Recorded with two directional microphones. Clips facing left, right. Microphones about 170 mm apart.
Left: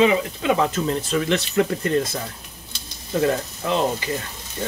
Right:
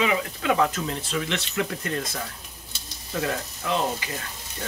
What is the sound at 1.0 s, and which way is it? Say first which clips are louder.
Speech: left 7 dB; 45° left (ahead or behind).